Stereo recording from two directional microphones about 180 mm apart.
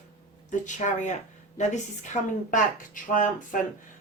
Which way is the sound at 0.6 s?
45° left (ahead or behind).